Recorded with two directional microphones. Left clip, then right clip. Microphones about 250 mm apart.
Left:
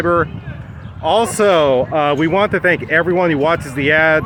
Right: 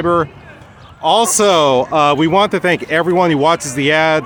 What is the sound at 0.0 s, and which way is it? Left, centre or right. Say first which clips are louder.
Speech: even; centre.